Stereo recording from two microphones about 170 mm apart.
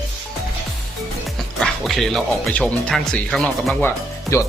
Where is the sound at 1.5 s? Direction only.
Centre (ahead or behind).